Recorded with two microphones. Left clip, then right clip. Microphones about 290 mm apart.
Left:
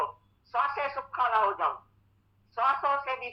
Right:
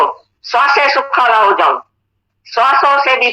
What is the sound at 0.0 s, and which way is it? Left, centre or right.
Speech, right.